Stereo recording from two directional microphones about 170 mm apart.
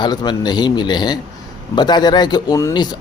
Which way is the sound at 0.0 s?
25° left (ahead or behind).